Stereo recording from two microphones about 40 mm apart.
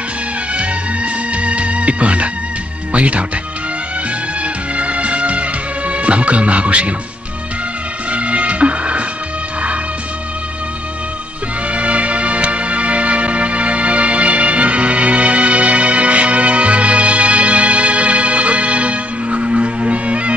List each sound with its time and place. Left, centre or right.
0.6 s music: right
2.9 s speech: right
4.4 s music: right
8.1 s music: right
11.7 s music: right